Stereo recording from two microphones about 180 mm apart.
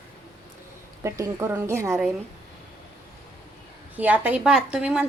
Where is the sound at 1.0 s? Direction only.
15° right (ahead or behind).